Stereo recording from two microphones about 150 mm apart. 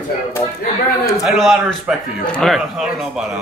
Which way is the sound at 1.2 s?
Centre (ahead or behind).